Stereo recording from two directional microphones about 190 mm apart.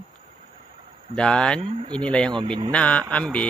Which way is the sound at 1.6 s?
25° right (ahead or behind).